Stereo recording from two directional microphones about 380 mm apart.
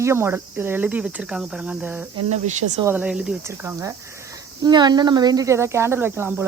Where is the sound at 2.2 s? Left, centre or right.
Centre.